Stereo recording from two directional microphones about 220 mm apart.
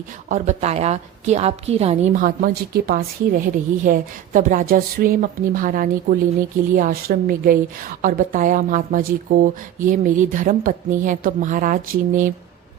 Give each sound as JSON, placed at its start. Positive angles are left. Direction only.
{"t": 0.3, "sound": "a woman's voice", "side_deg": -30}